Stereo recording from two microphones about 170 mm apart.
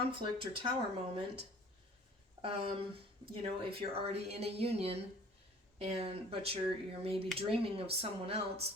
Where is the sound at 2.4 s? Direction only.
35° right (ahead or behind).